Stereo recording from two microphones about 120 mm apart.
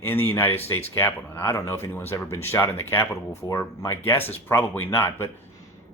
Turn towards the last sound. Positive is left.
turn(degrees=20)  # may be behind; listen again after turning